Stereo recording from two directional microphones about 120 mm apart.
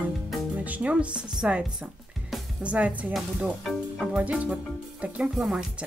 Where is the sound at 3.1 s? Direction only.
Centre (ahead or behind).